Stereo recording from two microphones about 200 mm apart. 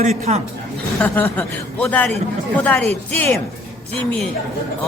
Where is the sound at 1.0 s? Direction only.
10° left (ahead or behind).